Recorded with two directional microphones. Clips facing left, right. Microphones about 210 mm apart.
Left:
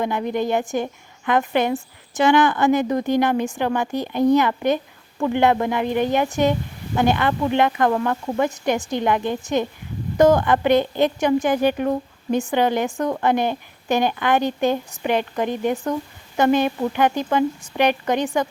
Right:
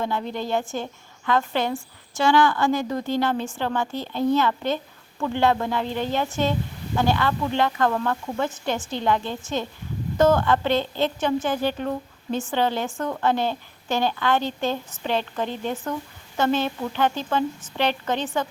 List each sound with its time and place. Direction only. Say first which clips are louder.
0.0 s speech: left 5 dB; 15° left (ahead or behind)